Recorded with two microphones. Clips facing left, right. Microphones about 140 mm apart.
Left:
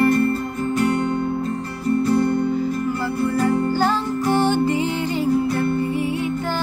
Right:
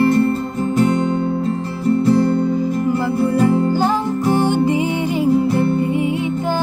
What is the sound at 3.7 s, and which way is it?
Music, 15° right (ahead or behind).